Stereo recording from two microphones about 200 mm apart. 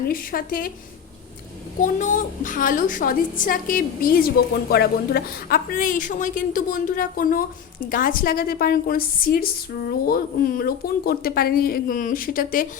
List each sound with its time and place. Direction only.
0.1 s a woman's voice: 45° left (ahead or behind)
1.8 s a woman's voice: 40° left (ahead or behind)